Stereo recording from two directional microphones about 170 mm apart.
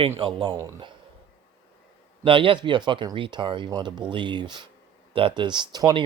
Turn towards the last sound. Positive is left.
turn(degrees=-25)  # may be behind; listen again after turning